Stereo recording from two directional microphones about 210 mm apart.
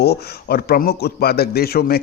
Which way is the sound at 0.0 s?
50° left (ahead or behind).